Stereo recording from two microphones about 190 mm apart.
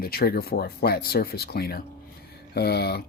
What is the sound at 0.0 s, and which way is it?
Speech, 50° left (ahead or behind).